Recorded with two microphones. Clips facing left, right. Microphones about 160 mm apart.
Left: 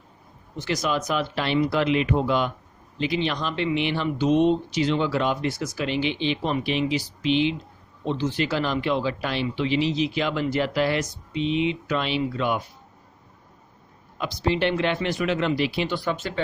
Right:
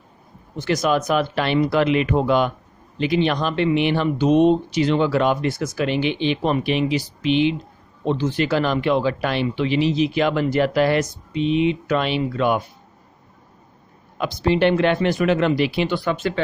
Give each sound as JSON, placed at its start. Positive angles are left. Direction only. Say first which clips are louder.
{"t": 0.6, "sound": "speech", "louder": "right 6 dB", "side_deg": -50}
{"t": 14.2, "sound": "speech", "louder": "right 5 dB", "side_deg": -55}